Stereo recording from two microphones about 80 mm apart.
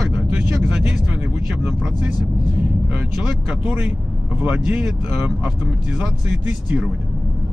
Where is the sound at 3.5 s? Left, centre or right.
Centre.